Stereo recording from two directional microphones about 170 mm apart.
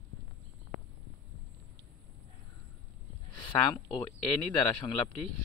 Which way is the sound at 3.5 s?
25° left (ahead or behind).